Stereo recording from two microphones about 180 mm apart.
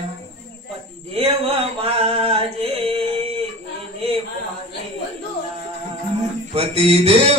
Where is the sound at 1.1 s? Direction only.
30° right (ahead or behind).